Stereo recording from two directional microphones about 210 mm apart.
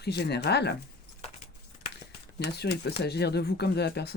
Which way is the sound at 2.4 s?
50° left (ahead or behind).